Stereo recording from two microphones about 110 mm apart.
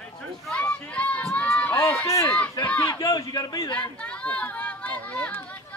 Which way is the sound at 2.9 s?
30° left (ahead or behind).